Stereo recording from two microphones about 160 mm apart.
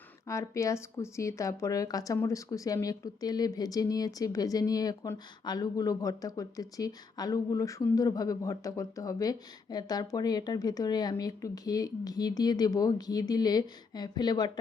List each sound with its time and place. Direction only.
0.3 s a woman's voice: 20° left (ahead or behind)